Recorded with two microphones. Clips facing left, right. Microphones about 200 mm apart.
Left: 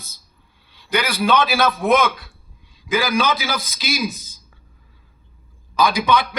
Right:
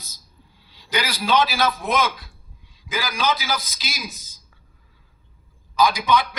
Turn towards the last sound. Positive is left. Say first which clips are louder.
# left 1 dB
turn(degrees=60)  # may be behind; listen again after turning